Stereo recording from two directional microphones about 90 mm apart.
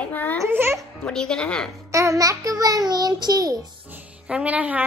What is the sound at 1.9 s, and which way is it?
A child's voice, 35° right (ahead or behind).